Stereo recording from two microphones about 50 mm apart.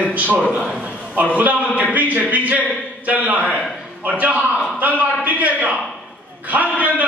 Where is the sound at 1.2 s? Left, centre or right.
Right.